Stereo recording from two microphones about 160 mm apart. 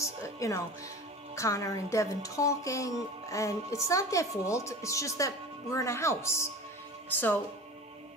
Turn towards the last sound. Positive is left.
turn(degrees=10)  # may be behind; listen again after turning